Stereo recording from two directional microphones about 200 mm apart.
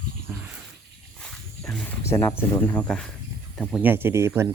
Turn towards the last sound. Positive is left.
turn(degrees=-15)  # may be behind; listen again after turning